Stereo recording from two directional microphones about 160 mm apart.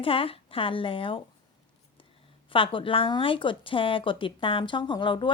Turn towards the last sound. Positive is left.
turn(degrees=30)  # may be behind; listen again after turning